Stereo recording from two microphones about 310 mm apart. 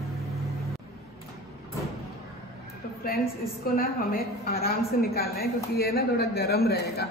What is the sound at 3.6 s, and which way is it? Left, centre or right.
A woman's voice, left.